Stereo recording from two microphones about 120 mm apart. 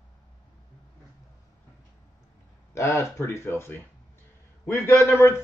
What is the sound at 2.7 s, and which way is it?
Speech, 20° left (ahead or behind).